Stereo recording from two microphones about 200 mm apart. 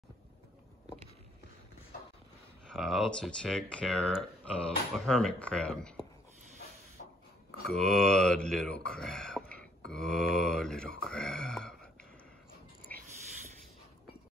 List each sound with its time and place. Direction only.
2.6 s speech: centre (ahead or behind)
7.0 s dog: 50° left (ahead or behind)
7.7 s speech: 5° left (ahead or behind)
11.1 s a sound: 5° left (ahead or behind)